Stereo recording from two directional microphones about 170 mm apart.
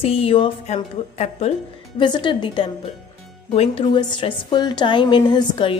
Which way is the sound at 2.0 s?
25° left (ahead or behind).